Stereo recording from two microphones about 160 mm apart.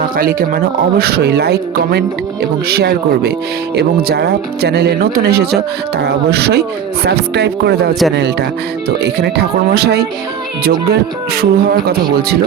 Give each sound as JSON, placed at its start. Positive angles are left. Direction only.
{"t": 0.0, "sound": "a man's voice", "side_deg": -65}